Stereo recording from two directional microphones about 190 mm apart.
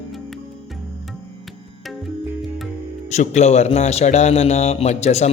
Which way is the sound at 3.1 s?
35° left (ahead or behind).